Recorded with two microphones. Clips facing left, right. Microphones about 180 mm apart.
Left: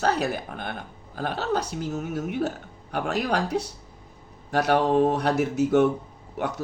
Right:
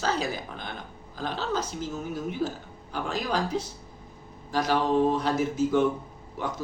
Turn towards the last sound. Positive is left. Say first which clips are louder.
# left 3 dB
turn(degrees=65)  # may be behind; listen again after turning